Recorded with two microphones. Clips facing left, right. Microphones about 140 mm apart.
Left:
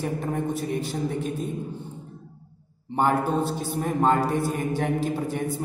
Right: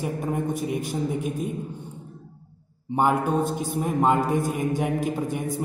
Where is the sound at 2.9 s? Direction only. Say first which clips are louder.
Right 1 dB; 15° right (ahead or behind).